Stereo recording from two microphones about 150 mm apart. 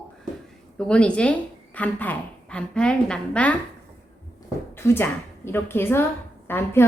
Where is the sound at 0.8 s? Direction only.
5° left (ahead or behind).